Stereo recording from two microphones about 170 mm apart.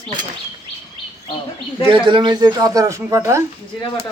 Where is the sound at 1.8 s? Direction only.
30° right (ahead or behind).